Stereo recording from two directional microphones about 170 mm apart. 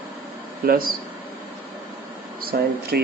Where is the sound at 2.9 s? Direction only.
65° right (ahead or behind).